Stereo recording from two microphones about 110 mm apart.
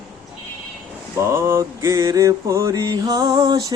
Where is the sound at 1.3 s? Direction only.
20° right (ahead or behind).